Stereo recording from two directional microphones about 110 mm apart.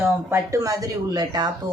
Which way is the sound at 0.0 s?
25° right (ahead or behind).